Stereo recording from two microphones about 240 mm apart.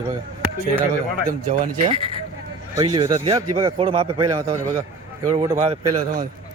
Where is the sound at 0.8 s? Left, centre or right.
Right.